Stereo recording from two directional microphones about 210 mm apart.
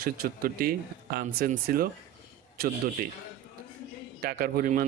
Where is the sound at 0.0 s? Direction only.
45° right (ahead or behind).